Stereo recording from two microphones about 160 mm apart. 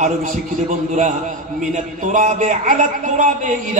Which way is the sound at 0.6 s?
50° right (ahead or behind).